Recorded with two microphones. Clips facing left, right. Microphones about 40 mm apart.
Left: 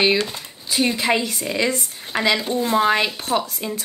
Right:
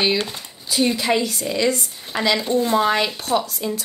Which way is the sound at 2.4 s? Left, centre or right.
Centre.